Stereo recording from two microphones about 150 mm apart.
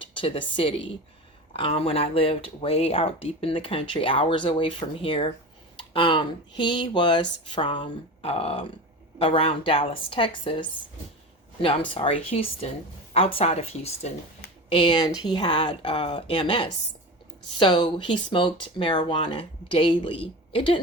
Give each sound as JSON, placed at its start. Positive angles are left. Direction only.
{"t": 0.2, "sound": "speech", "side_deg": 35}